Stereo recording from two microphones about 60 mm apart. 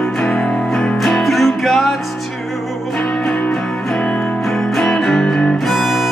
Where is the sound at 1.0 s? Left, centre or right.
Centre.